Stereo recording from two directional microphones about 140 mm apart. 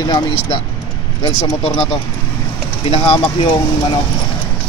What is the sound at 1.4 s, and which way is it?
Speech, 40° left (ahead or behind).